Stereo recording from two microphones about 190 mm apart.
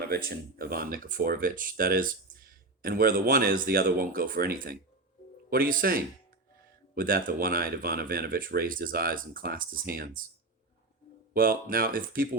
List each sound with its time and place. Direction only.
0.0 s speech: 50° right (ahead or behind)
11.3 s speech: 50° right (ahead or behind)